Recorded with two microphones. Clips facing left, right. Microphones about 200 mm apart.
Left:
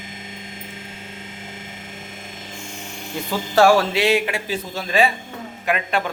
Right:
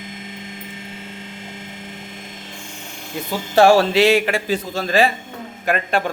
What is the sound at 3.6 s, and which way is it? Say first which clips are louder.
Music: right 2 dB; 25° right (ahead or behind).